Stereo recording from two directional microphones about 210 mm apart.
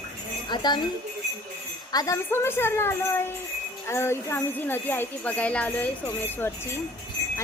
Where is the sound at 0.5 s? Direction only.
20° left (ahead or behind).